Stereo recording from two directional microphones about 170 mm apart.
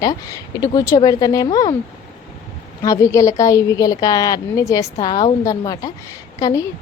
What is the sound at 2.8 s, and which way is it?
A woman's voice, 20° left (ahead or behind).